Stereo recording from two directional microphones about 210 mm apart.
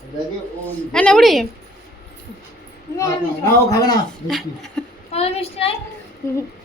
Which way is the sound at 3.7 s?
20° left (ahead or behind).